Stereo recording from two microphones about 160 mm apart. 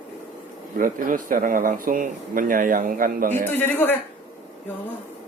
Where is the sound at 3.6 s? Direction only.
10° left (ahead or behind).